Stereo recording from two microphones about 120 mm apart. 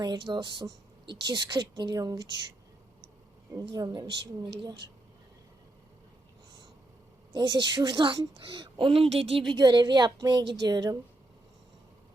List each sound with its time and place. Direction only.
0.0 s speech: 40° right (ahead or behind)
3.5 s speech: 30° right (ahead or behind)
7.3 s speech: 35° right (ahead or behind); by 9.4 s 50° right (ahead or behind)
9.5 s speech: 35° right (ahead or behind)